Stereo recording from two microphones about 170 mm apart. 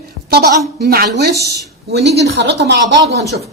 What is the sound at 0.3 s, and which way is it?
A woman's voice, 65° right (ahead or behind).